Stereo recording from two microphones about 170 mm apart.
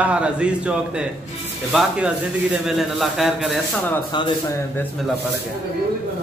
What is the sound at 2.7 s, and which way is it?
Speech, centre (ahead or behind).